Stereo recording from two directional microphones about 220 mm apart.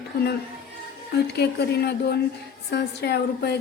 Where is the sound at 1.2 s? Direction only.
50° left (ahead or behind).